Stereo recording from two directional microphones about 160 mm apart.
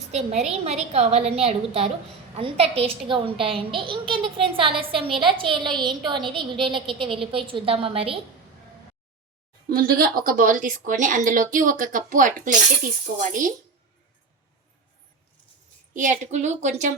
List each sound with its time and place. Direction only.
0.1 s a child's voice: 45° right (ahead or behind)
9.6 s speech: 65° right (ahead or behind)
16.0 s a woman's voice: 50° right (ahead or behind)